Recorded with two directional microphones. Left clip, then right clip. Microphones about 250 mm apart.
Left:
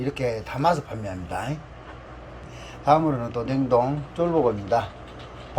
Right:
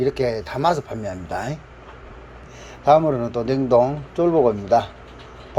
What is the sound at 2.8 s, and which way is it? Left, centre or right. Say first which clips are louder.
A man's voice: right 5 dB; right.